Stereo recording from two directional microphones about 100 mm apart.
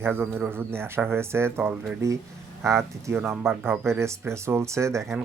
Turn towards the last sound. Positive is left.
turn(degrees=-30)  # may be behind; listen again after turning